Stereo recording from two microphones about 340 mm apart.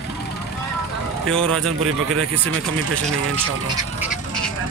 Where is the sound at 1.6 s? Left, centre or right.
Right.